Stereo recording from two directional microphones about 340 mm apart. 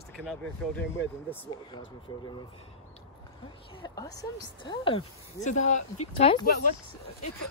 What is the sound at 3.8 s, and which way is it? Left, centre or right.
Speech, centre.